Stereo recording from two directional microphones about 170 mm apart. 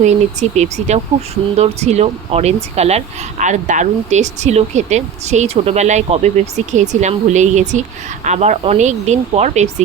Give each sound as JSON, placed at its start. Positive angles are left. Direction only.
{"t": 0.0, "sound": "speech", "side_deg": -45}